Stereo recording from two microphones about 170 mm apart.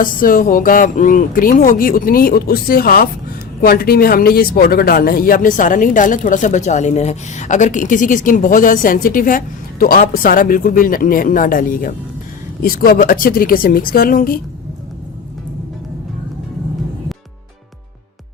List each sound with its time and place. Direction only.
0.0 s speech: 55° left (ahead or behind)